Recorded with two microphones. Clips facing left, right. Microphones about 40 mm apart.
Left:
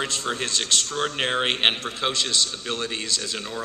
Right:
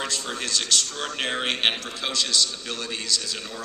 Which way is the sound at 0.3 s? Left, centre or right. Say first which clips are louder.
Left 2 dB; left.